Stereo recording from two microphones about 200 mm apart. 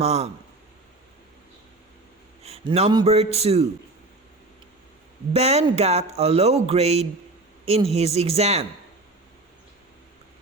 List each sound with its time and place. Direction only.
0.0 s speech: 30° right (ahead or behind)
2.4 s a sound: 30° right (ahead or behind)
3.1 s speech: 30° right (ahead or behind)
5.3 s speech: 30° right (ahead or behind)